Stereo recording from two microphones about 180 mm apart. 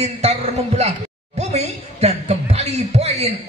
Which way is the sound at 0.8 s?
35° right (ahead or behind).